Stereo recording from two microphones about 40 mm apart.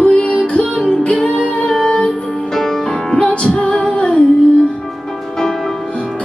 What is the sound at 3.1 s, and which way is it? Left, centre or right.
Music, left.